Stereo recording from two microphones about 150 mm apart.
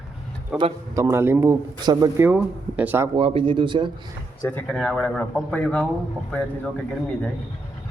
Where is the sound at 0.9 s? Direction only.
20° right (ahead or behind).